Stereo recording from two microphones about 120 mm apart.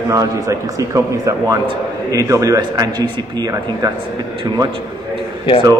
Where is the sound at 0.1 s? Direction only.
25° right (ahead or behind).